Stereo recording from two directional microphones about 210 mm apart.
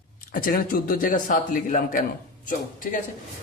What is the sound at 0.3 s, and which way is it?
A man's voice, 45° left (ahead or behind).